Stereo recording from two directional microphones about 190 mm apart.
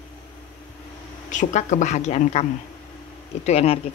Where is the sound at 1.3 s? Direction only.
40° left (ahead or behind).